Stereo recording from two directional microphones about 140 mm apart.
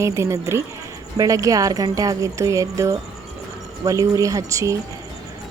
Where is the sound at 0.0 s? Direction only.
20° right (ahead or behind).